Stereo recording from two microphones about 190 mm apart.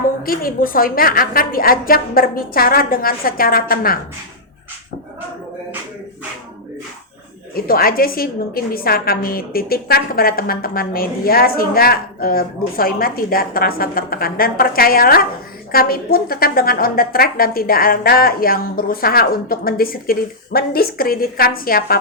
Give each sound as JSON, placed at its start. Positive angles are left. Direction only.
{"t": 0.2, "sound": "a woman's voice", "side_deg": 50}
{"t": 7.5, "sound": "a woman's voice", "side_deg": 50}